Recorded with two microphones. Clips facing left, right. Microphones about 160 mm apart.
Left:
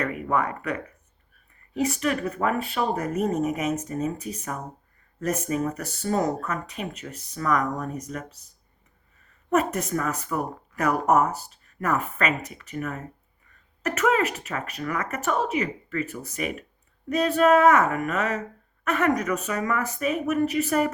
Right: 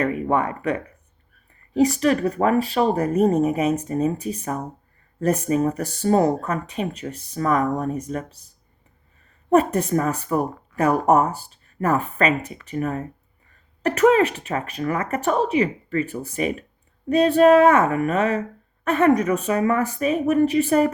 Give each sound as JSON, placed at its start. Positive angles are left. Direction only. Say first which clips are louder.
{"t": 0.0, "sound": "speech", "louder": "right 4 dB", "side_deg": -30}
{"t": 9.5, "sound": "speech", "louder": "right 6 dB", "side_deg": -30}